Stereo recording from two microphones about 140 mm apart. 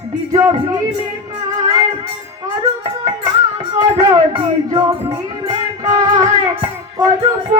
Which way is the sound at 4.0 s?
30° right (ahead or behind).